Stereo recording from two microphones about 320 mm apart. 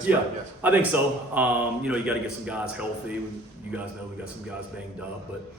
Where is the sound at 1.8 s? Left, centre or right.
Centre.